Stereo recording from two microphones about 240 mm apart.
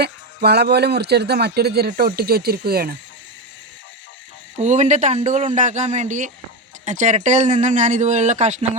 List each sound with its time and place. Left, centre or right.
0.0 s speech: right
4.6 s speech: right